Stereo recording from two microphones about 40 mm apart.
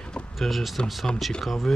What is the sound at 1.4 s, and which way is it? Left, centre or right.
Speech, centre.